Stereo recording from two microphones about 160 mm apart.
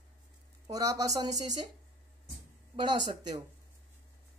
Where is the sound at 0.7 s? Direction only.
25° right (ahead or behind).